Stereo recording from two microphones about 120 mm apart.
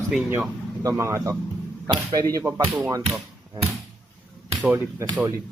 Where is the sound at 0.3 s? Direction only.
20° right (ahead or behind).